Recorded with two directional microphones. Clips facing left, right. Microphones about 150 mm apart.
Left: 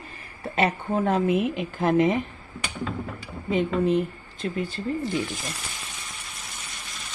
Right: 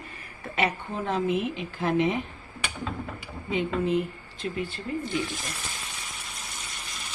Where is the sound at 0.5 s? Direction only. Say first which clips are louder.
Left 5 dB; 45° left (ahead or behind).